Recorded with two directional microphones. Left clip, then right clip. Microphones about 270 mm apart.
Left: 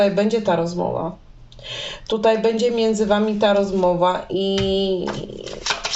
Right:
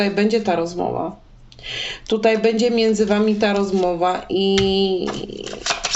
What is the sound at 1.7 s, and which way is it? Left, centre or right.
Speech, right.